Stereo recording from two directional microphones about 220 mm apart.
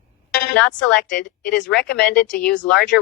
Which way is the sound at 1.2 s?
50° left (ahead or behind).